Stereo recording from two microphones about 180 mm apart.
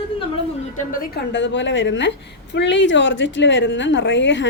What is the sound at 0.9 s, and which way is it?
A woman's voice, 70° left (ahead or behind).